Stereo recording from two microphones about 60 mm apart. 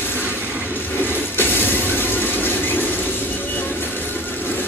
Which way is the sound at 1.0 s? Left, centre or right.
Left.